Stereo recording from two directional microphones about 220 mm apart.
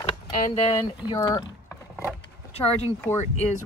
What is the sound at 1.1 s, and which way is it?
Speech, 20° left (ahead or behind).